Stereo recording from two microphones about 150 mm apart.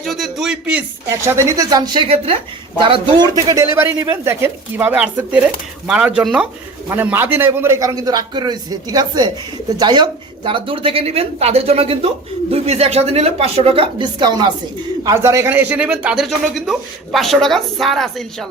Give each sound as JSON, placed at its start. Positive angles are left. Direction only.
{"t": 0.0, "sound": "a man's voice", "side_deg": 0}